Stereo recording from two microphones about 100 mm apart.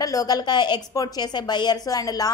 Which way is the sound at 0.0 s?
35° left (ahead or behind).